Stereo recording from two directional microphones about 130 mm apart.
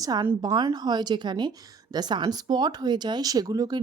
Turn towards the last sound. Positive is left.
turn(degrees=-30)  # may be behind; listen again after turning